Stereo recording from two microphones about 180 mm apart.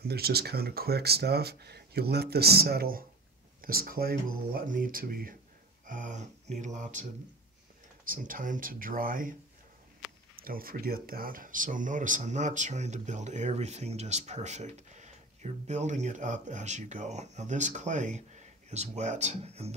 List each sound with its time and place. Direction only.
0.0 s speech: 60° right (ahead or behind)
10.4 s speech: 55° right (ahead or behind); by 19.7 s 35° right (ahead or behind)